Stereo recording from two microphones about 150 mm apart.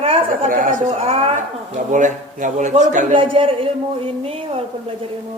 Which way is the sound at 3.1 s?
35° right (ahead or behind).